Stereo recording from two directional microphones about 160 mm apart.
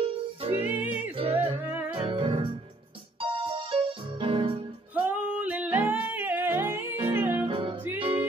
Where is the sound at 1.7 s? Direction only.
10° right (ahead or behind).